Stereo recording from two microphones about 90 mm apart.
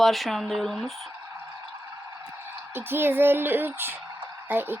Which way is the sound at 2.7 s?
25° right (ahead or behind).